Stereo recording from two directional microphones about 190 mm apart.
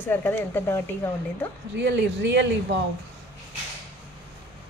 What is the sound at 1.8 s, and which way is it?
Speech, 65° right (ahead or behind).